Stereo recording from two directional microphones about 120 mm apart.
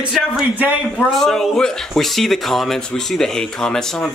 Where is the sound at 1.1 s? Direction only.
5° left (ahead or behind).